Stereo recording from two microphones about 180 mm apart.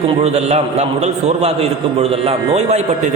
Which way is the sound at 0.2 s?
35° right (ahead or behind).